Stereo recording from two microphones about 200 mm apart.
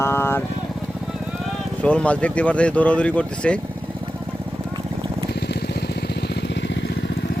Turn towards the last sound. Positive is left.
turn(degrees=60)  # may be behind; listen again after turning